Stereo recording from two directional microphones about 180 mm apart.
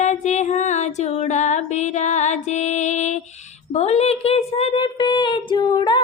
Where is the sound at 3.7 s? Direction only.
35° left (ahead or behind).